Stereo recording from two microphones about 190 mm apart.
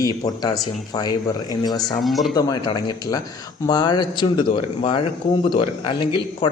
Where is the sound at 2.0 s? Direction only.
Centre (ahead or behind).